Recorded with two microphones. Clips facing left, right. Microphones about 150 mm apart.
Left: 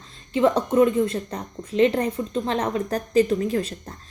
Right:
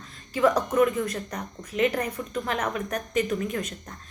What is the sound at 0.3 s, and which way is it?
Speech, 25° left (ahead or behind).